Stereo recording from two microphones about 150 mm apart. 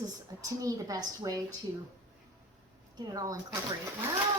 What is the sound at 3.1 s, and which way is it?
Speech, 25° right (ahead or behind).